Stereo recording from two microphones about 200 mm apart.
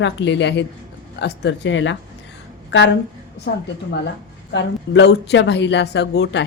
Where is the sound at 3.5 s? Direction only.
55° left (ahead or behind).